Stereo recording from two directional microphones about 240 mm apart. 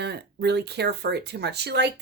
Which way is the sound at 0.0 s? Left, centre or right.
Right.